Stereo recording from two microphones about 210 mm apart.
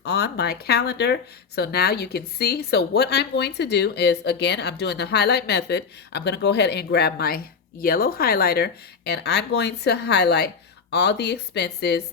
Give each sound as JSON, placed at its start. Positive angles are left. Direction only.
{"t": 0.0, "sound": "speech", "side_deg": 50}